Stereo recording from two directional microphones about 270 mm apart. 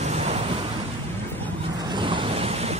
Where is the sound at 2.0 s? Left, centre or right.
Centre.